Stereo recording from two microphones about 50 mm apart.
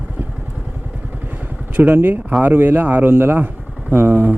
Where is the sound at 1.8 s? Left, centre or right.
Right.